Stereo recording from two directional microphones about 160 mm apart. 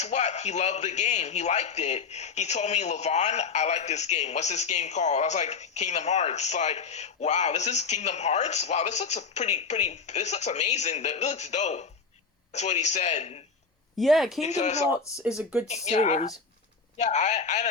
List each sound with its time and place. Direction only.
0.0 s speech: 45° left (ahead or behind)
14.0 s speech: centre (ahead or behind)
14.4 s speech: 45° left (ahead or behind)
15.4 s speech: 10° right (ahead or behind)
15.6 s speech: 45° left (ahead or behind)